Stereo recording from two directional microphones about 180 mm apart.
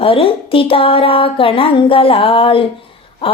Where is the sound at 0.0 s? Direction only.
30° left (ahead or behind).